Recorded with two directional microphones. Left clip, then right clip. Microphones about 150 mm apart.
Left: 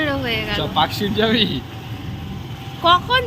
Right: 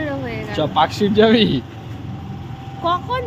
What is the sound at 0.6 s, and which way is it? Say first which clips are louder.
A man's voice: right 6 dB; 90° right.